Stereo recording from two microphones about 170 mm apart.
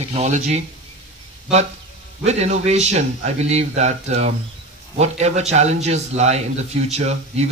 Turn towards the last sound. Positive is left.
turn(degrees=-40)  # may be behind; listen again after turning